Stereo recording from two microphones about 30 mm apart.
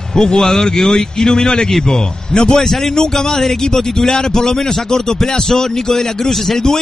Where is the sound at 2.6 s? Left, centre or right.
Centre.